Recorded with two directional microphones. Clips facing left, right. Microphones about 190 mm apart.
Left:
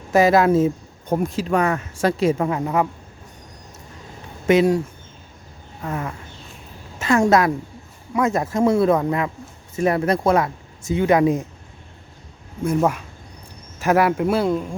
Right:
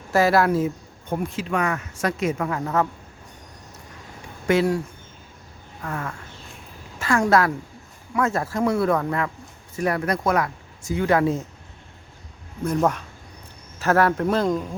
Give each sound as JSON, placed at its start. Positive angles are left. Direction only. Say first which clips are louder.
{"t": 0.1, "sound": "speech", "louder": "left 4 dB", "side_deg": 20}
{"t": 1.1, "sound": "speech", "louder": "left 5 dB", "side_deg": 40}
{"t": 4.4, "sound": "speech", "louder": "left 4 dB", "side_deg": 20}
{"t": 5.8, "sound": "speech", "louder": "left 3 dB", "side_deg": 20}
{"t": 12.6, "sound": "speech", "louder": "left 2 dB", "side_deg": 5}